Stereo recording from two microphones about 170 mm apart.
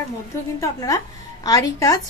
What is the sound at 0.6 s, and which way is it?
A woman's voice, 20° left (ahead or behind).